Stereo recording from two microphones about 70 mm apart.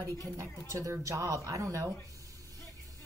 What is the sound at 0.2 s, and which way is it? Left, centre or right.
Speech, right.